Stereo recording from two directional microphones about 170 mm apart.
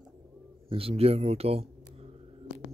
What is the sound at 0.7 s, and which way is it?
Speech, 35° right (ahead or behind).